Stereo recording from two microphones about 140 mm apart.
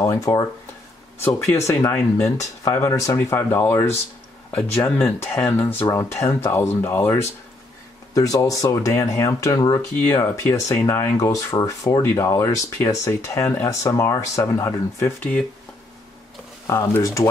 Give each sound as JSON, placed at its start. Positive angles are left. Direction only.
{"t": 0.0, "sound": "speech", "side_deg": 20}
{"t": 1.7, "sound": "speech", "side_deg": 20}
{"t": 16.6, "sound": "speech", "side_deg": 20}